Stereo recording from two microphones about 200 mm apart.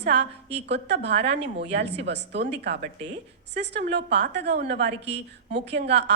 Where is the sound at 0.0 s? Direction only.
60° right (ahead or behind).